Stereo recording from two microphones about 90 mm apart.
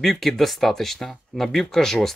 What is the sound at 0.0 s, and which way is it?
Speech, 5° left (ahead or behind).